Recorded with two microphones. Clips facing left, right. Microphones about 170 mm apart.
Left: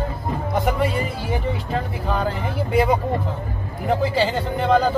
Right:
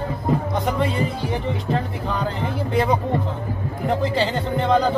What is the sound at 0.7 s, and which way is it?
Speech, 10° left (ahead or behind).